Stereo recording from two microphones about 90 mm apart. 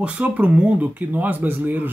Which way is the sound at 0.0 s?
15° right (ahead or behind).